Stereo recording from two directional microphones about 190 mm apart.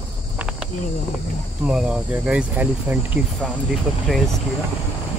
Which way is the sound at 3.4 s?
Centre (ahead or behind).